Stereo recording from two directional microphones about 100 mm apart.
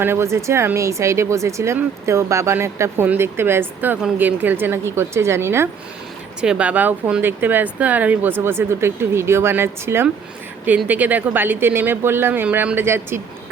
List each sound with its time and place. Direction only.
0.0 s speech: 25° right (ahead or behind)
6.4 s speech: 10° right (ahead or behind)